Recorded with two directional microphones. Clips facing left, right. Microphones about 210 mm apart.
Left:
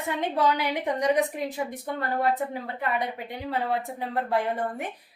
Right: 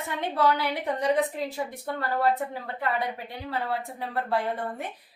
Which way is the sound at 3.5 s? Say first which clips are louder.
Left 3 dB; 20° left (ahead or behind).